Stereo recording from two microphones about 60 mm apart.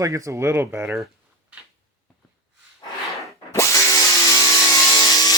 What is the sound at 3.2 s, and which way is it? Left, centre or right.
Tools, left.